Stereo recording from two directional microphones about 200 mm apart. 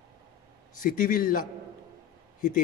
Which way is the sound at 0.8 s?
45° left (ahead or behind).